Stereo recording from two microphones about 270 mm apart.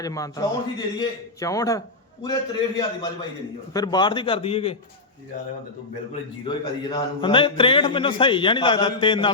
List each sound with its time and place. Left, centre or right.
0.0 s a man's voice: centre
6.4 s a man's voice: centre